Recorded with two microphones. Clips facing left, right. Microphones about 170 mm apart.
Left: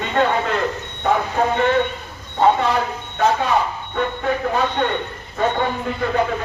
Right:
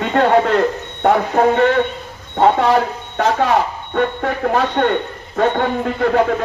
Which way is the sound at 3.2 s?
90° right.